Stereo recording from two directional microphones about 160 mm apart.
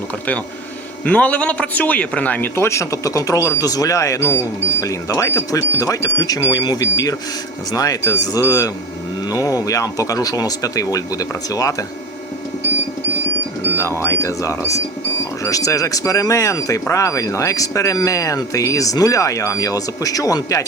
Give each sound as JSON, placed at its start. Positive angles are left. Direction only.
{"t": 1.0, "sound": "speech", "side_deg": 10}
{"t": 14.0, "sound": "speech", "side_deg": 20}